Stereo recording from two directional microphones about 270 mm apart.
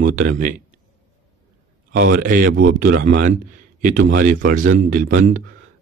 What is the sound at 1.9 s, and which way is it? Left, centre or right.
A man's voice, right.